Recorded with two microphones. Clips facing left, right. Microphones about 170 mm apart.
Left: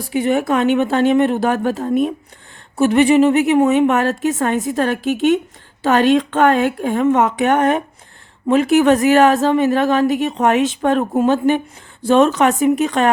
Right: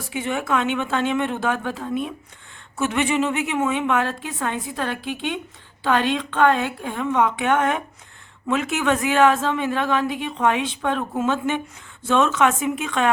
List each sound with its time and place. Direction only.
0.1 s speech: 40° left (ahead or behind)